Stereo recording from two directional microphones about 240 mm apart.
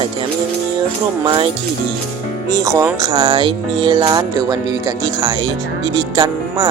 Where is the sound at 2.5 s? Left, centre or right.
Centre.